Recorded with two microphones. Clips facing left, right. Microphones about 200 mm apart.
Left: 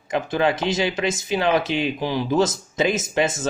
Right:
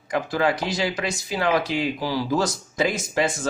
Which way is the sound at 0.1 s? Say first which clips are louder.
Left 1 dB; 20° left (ahead or behind).